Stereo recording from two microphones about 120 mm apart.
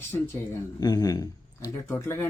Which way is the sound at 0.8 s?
30° left (ahead or behind).